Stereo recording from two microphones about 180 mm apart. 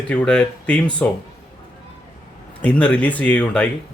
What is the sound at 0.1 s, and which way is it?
Speech, 5° left (ahead or behind).